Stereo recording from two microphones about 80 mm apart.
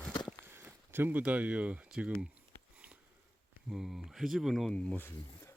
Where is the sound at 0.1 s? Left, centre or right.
Left.